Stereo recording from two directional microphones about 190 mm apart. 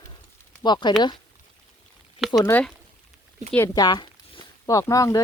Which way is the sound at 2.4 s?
10° left (ahead or behind).